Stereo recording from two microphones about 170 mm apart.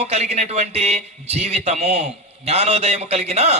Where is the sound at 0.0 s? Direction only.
40° right (ahead or behind).